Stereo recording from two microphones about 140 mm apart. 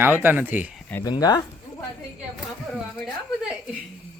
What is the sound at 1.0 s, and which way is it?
Speech, 25° left (ahead or behind).